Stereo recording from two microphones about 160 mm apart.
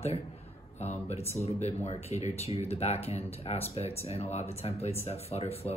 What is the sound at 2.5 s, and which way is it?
Speech, 40° left (ahead or behind).